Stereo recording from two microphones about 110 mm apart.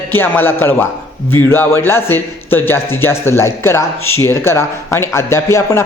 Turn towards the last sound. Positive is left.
turn(degrees=25)  # may be behind; listen again after turning